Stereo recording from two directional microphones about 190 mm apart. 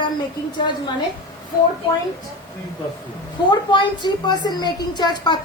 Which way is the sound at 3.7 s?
25° left (ahead or behind).